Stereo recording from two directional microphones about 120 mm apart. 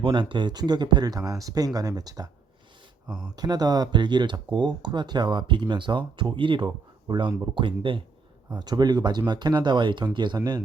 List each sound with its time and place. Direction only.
0.0 s speech: 40° right (ahead or behind)
3.3 s speech: 35° right (ahead or behind)
8.4 s speech: 35° right (ahead or behind)